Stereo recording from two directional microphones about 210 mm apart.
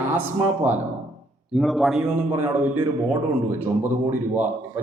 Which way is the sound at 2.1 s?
10° right (ahead or behind).